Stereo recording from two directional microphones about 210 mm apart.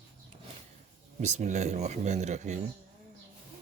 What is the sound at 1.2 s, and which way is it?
Speech, 35° right (ahead or behind).